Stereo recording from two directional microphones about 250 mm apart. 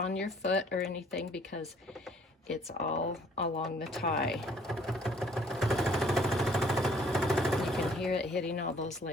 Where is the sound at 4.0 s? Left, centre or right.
Left.